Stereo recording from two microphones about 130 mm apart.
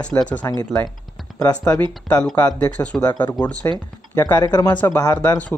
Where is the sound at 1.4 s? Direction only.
30° left (ahead or behind).